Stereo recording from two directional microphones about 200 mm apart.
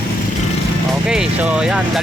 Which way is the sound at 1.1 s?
5° right (ahead or behind).